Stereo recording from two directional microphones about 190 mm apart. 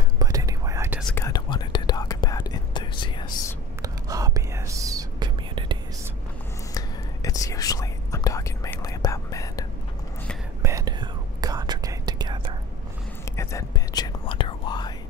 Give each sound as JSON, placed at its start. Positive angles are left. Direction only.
{"t": 0.2, "sound": "whispering", "side_deg": -20}
{"t": 1.1, "sound": "whispering", "side_deg": 20}
{"t": 3.8, "sound": "whispering", "side_deg": -20}
{"t": 6.7, "sound": "whispering", "side_deg": 20}
{"t": 10.6, "sound": "whispering", "side_deg": -20}
{"t": 13.4, "sound": "whispering", "side_deg": 15}